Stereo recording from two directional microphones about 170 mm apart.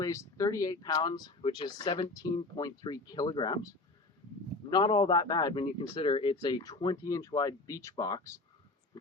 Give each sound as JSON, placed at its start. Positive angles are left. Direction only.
{"t": 0.0, "sound": "speech", "side_deg": 20}